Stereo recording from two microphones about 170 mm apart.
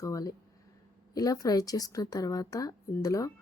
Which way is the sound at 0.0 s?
20° left (ahead or behind).